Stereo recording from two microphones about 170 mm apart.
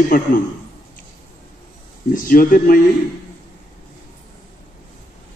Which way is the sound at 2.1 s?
55° left (ahead or behind).